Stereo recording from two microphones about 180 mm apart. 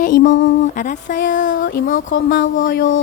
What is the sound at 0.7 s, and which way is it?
Speech, 45° left (ahead or behind).